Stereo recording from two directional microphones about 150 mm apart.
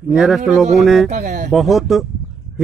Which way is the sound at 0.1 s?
Centre (ahead or behind).